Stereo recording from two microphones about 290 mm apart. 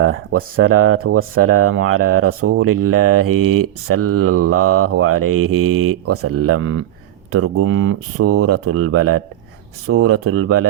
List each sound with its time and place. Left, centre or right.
0.0 s speech: right
5.2 s mantra: right
6.1 s speech: right